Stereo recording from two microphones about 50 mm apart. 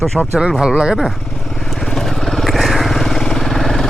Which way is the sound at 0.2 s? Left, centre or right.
Centre.